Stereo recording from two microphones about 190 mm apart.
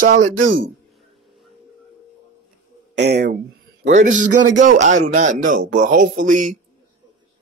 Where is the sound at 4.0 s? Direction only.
40° right (ahead or behind).